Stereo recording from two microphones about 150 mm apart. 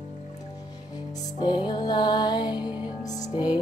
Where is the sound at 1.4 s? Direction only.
30° left (ahead or behind).